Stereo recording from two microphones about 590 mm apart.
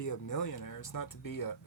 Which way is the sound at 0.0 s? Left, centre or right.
Left.